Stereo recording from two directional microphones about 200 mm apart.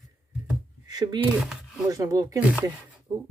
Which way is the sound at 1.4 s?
5° right (ahead or behind).